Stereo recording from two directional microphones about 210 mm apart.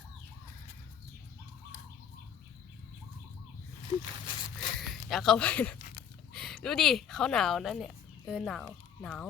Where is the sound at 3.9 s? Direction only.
20° left (ahead or behind).